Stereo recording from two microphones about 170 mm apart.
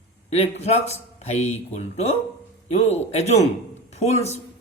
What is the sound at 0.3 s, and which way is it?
A woman's voice, 40° left (ahead or behind).